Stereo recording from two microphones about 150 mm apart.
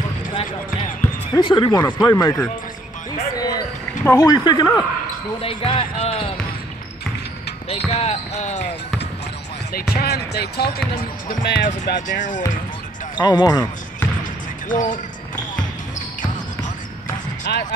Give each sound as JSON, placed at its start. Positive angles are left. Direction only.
{"t": 1.3, "sound": "speech", "side_deg": 30}
{"t": 3.3, "sound": "basketball bounce", "side_deg": 25}
{"t": 4.0, "sound": "speech", "side_deg": 15}
{"t": 4.3, "sound": "speech", "side_deg": 25}
{"t": 5.4, "sound": "speech", "side_deg": 35}
{"t": 7.7, "sound": "speech", "side_deg": 45}
{"t": 9.9, "sound": "speech", "side_deg": 90}
{"t": 11.2, "sound": "speech", "side_deg": 60}
{"t": 13.1, "sound": "speech", "side_deg": 30}
{"t": 14.7, "sound": "speech", "side_deg": 60}
{"t": 17.5, "sound": "speech", "side_deg": 90}